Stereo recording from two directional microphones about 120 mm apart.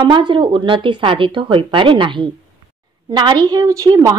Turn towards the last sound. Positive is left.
turn(degrees=-30)  # may be behind; listen again after turning